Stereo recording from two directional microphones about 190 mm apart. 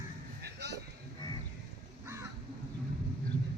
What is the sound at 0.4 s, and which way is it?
Music, 65° right (ahead or behind).